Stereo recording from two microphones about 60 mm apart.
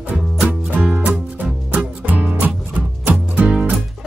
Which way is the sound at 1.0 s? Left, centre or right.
Right.